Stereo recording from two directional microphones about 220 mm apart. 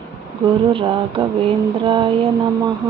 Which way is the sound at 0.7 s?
25° right (ahead or behind).